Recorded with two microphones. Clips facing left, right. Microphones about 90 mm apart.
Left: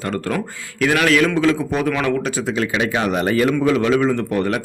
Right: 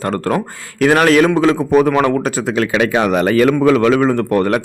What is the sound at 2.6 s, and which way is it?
Speech, 80° right.